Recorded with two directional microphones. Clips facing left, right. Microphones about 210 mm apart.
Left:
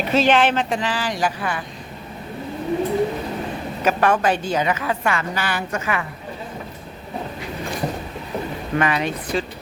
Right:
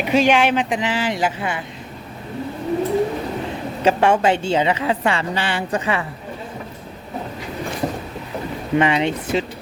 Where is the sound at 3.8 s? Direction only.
25° right (ahead or behind).